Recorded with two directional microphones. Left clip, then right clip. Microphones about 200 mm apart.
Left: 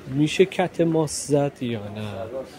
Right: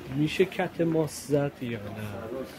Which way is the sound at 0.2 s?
45° left (ahead or behind).